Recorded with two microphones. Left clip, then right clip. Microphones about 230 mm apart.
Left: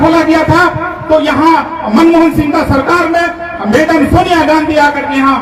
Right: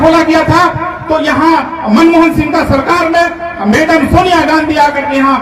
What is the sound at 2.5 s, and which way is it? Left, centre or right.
Speech, right.